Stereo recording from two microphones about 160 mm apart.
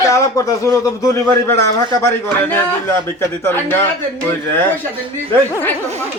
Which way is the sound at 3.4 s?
15° left (ahead or behind).